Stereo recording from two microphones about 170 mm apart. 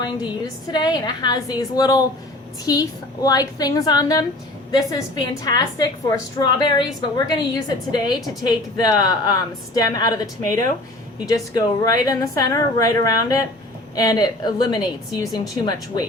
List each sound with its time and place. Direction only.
0.0 s a woman's voice: 25° left (ahead or behind)